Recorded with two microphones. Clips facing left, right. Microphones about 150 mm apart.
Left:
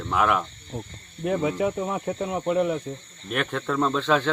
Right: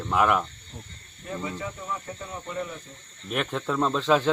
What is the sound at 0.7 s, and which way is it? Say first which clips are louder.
Speech: left 12 dB; 70° left (ahead or behind).